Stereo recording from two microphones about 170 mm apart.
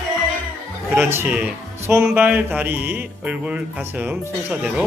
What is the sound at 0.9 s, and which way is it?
Speech, 15° right (ahead or behind).